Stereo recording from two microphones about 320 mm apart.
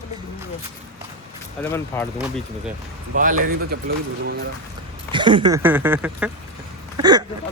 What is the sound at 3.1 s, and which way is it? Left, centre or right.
Speech, right.